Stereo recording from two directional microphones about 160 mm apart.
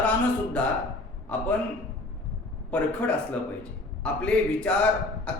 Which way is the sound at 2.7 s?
10° left (ahead or behind).